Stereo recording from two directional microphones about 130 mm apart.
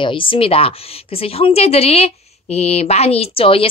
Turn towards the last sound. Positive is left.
turn(degrees=45)  # may be behind; listen again after turning